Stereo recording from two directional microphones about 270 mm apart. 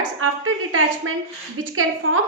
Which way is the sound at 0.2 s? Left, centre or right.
Right.